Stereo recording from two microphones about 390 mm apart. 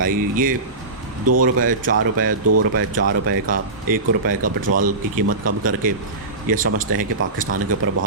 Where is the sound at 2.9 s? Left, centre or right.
Right.